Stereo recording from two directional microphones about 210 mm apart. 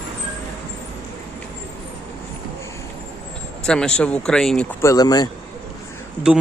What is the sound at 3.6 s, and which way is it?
Speech, 5° left (ahead or behind).